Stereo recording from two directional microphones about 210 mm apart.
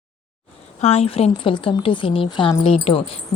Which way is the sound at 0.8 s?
30° left (ahead or behind).